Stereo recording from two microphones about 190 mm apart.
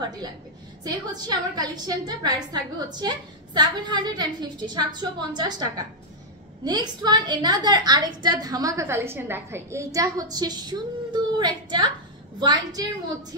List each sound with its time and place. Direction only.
0.8 s a woman's voice: 20° right (ahead or behind)